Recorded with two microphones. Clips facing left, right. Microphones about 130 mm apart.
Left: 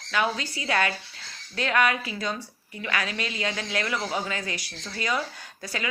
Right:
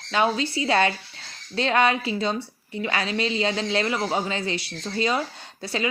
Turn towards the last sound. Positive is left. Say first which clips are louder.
# right 5 dB
turn(degrees=-25)  # may be behind; listen again after turning